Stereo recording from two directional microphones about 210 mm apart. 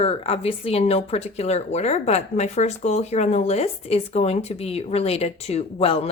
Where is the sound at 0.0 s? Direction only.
30° left (ahead or behind).